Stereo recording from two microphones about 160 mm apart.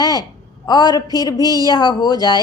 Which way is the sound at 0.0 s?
25° left (ahead or behind).